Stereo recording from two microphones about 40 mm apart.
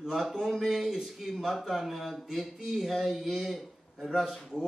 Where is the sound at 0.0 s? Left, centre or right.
Centre.